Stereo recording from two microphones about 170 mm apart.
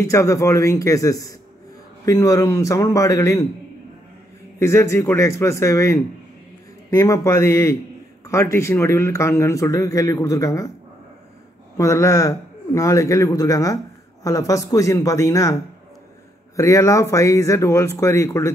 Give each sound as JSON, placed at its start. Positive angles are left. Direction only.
{"t": 0.0, "sound": "a man's voice", "side_deg": 20}
{"t": 4.6, "sound": "speech", "side_deg": 15}
{"t": 11.7, "sound": "a man's voice", "side_deg": 15}
{"t": 16.5, "sound": "speech", "side_deg": 20}